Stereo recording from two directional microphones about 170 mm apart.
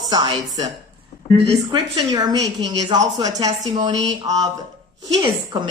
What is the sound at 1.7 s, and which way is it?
Speech, 20° right (ahead or behind).